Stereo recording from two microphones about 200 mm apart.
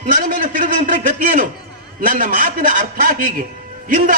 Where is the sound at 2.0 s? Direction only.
45° right (ahead or behind).